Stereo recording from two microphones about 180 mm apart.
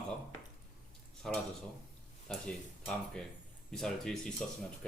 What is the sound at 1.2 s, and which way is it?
Speech, 5° left (ahead or behind).